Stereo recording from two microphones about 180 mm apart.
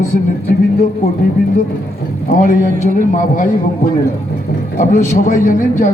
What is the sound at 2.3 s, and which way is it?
A man's voice, 45° left (ahead or behind).